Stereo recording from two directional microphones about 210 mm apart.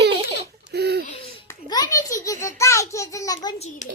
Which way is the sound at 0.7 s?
50° right (ahead or behind).